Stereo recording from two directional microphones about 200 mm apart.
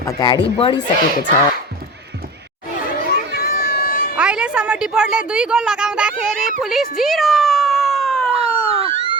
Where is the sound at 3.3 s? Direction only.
50° left (ahead or behind).